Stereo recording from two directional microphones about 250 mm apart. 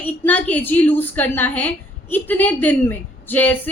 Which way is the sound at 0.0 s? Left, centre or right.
Centre.